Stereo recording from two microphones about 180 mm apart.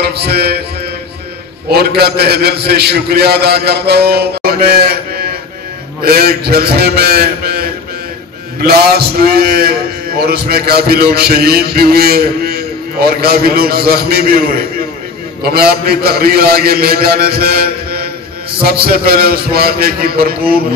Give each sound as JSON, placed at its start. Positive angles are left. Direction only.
{"t": 0.0, "sound": "a man's voice", "side_deg": -65}
{"t": 1.7, "sound": "a man's voice", "side_deg": -60}
{"t": 15.4, "sound": "a man's voice", "side_deg": -60}